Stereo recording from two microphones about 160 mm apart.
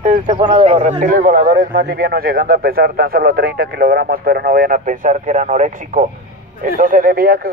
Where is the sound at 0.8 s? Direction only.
55° right (ahead or behind).